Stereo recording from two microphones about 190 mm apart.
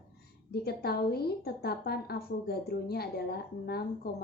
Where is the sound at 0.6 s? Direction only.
55° left (ahead or behind).